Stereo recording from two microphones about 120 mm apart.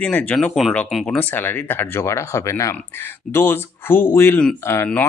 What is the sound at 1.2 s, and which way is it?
Speech, 15° left (ahead or behind).